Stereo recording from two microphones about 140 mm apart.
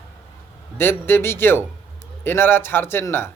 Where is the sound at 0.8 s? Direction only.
15° left (ahead or behind).